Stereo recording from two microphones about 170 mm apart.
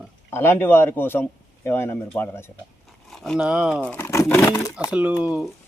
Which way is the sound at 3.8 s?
10° left (ahead or behind).